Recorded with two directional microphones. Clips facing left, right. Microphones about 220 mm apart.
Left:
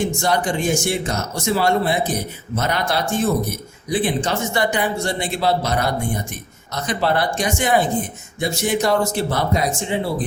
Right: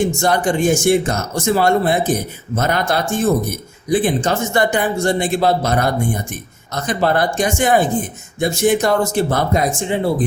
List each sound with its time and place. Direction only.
0.2 s a man's voice: 50° right (ahead or behind)